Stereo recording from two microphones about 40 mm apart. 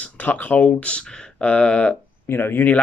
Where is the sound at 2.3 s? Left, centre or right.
Left.